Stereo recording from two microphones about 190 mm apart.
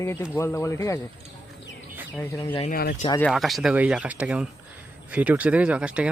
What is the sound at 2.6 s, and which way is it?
Speech, 50° left (ahead or behind).